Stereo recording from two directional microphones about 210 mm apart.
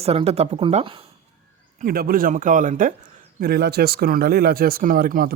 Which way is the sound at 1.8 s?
45° right (ahead or behind).